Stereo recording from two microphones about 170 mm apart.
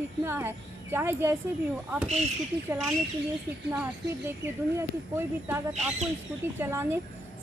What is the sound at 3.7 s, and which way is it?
A child's voice, 15° right (ahead or behind).